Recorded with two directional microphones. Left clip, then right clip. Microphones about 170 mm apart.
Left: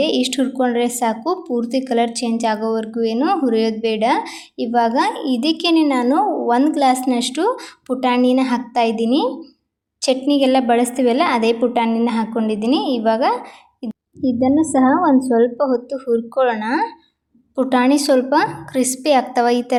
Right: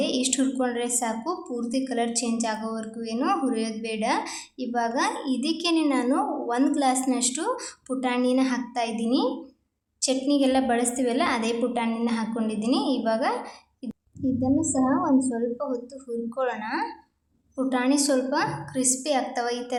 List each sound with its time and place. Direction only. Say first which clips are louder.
0.0 s a woman's voice: left 7 dB; 35° left (ahead or behind)